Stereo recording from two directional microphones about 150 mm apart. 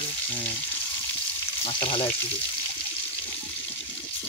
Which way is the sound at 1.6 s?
35° left (ahead or behind).